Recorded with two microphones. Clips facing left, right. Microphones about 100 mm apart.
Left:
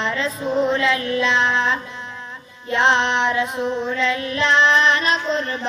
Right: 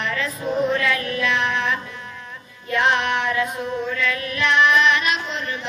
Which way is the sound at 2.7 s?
25° left (ahead or behind).